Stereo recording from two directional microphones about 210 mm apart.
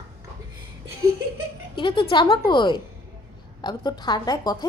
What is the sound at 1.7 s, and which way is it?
A woman's voice, 25° left (ahead or behind).